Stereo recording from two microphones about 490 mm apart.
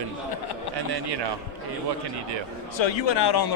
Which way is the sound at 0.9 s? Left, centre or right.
Right.